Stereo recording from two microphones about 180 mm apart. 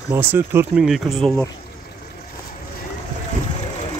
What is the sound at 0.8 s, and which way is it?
Speech, centre (ahead or behind).